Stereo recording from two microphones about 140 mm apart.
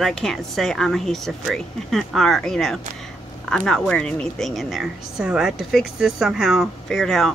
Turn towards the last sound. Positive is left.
turn(degrees=0)  # may be behind; listen again after turning